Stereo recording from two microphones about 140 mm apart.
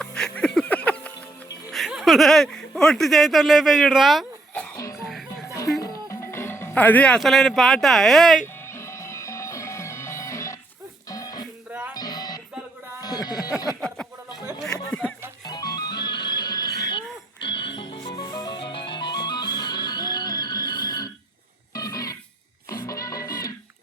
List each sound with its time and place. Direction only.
0.0 s a sound: 5° left (ahead or behind)
1.7 s speech: centre (ahead or behind)
5.0 s music: centre (ahead or behind)
5.8 s speech: 25° left (ahead or behind); by 8.4 s centre (ahead or behind)
8.6 s music: 20° left (ahead or behind)
11.7 s music: 15° right (ahead or behind)
11.9 s music: 30° left (ahead or behind)
13.0 s a sound: 30° left (ahead or behind)
13.8 s a sound: 5° left (ahead or behind)
15.4 s music: 30° left (ahead or behind)
21.7 s wild animals: 25° left (ahead or behind)
22.7 s music: 25° left (ahead or behind)